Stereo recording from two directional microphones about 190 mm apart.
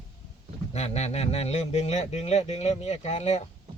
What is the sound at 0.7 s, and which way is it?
A man's voice, 35° left (ahead or behind).